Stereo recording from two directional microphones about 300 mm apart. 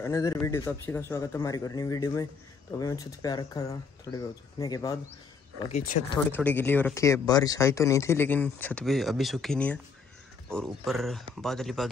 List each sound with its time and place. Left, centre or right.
0.0 s speech: centre
5.6 s speech: left
6.1 s speech: centre